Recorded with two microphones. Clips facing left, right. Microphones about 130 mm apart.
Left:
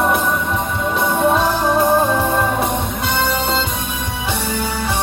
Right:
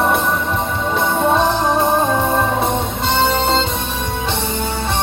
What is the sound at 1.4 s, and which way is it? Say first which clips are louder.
Music: even; 20° right (ahead or behind).